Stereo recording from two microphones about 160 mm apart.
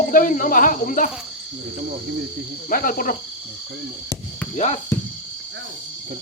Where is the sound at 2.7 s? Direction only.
60° left (ahead or behind).